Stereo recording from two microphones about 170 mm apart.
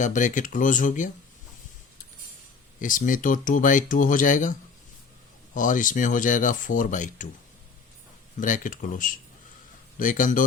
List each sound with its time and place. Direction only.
0.0 s speech: 45° left (ahead or behind)
2.8 s speech: 50° left (ahead or behind)
5.5 s speech: 50° left (ahead or behind)
8.4 s speech: 50° left (ahead or behind)